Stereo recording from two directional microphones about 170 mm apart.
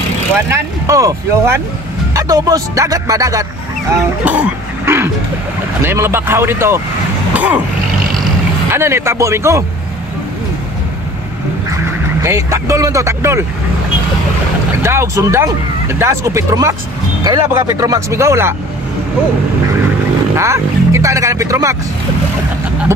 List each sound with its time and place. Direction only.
0.5 s speech: 20° right (ahead or behind)
4.2 s speech: 10° right (ahead or behind)
7.3 s a sound: 10° right (ahead or behind)
8.6 s speech: 15° right (ahead or behind)
12.2 s speech: 15° right (ahead or behind)
14.8 s speech: 15° right (ahead or behind)
20.3 s roaring cats: 15° right (ahead or behind)